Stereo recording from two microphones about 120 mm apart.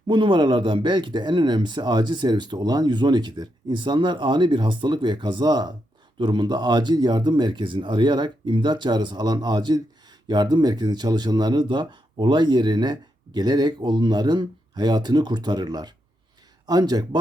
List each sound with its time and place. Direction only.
0.1 s speech: 40° right (ahead or behind)